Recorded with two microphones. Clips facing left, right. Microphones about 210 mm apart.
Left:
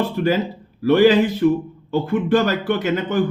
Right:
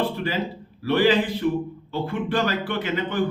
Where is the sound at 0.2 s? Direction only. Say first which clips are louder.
Left 7 dB; 50° left (ahead or behind).